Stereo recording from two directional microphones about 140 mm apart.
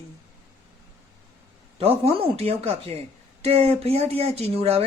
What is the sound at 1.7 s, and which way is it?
Speech, 40° right (ahead or behind).